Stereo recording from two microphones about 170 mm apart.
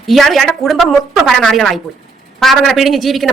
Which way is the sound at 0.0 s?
Centre (ahead or behind).